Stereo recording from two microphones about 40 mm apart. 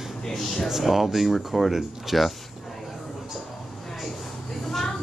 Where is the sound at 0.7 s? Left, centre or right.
Centre.